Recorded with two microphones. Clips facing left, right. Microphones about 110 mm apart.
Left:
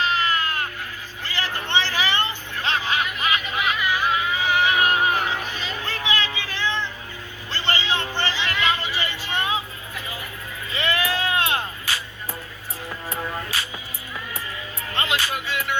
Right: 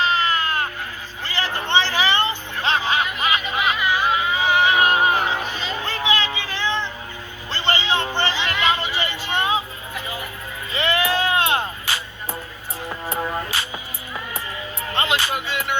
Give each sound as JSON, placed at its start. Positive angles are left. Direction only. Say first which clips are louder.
{"t": 0.0, "sound": "sheep", "louder": "right 2 dB", "side_deg": -25}
{"t": 1.2, "sound": "hubbub", "louder": "right 3 dB", "side_deg": -25}
{"t": 7.5, "sound": "music", "louder": "right 3 dB", "side_deg": -25}
{"t": 13.1, "sound": "music", "louder": "right 5 dB", "side_deg": -40}
{"t": 14.3, "sound": "music", "louder": "right 3 dB", "side_deg": -25}